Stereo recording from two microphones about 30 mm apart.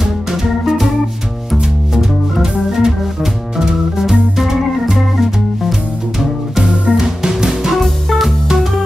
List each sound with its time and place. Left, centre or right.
0.0 s music: centre
2.0 s organ: centre
6.6 s music: right